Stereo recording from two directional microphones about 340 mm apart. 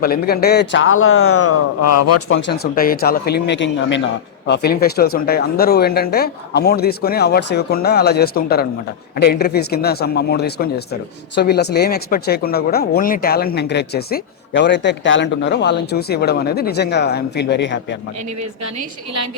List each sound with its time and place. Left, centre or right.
0.0 s a man's voice: left
2.3 s speech: left